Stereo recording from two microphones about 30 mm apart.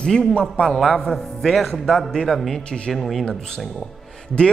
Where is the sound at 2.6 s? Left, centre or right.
Left.